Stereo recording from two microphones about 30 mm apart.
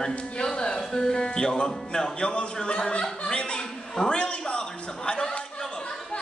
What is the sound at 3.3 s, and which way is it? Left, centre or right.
Chuckle, left.